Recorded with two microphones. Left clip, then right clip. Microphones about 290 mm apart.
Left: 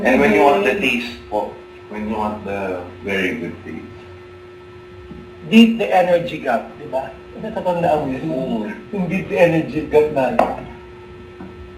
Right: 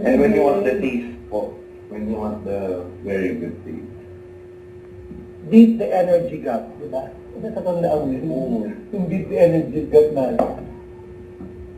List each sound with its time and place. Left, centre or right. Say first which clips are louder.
0.0 s speech: left 3 dB; centre
5.5 s speech: left 1 dB; centre
8.3 s speech: left 1 dB; left
8.6 s speech: left 2 dB; centre